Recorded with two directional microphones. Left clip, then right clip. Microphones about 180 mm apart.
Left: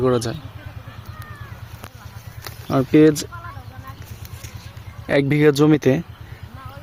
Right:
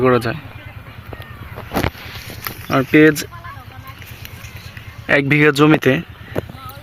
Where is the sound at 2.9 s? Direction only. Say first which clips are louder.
Right 2 dB; 15° left (ahead or behind).